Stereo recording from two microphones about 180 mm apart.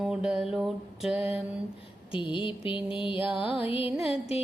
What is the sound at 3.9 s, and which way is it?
Mantra, 5° right (ahead or behind).